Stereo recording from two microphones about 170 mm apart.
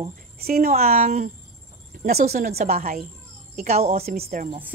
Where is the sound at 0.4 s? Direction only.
60° right (ahead or behind).